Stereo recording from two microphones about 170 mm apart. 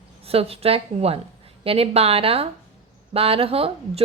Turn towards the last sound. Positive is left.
turn(degrees=-35)  # may be behind; listen again after turning